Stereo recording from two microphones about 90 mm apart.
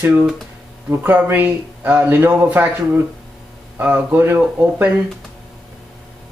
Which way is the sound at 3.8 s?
20° right (ahead or behind).